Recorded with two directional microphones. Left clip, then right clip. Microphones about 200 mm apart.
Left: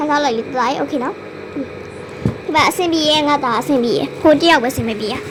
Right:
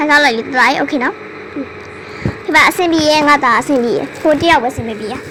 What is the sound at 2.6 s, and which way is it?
A child's voice, 20° right (ahead or behind).